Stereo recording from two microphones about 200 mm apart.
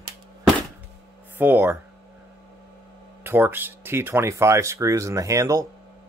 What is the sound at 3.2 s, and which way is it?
Speech, 10° right (ahead or behind).